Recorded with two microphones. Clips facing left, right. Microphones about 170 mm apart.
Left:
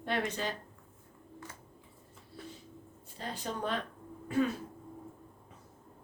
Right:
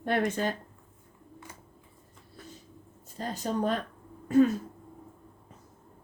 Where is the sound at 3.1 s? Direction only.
40° right (ahead or behind).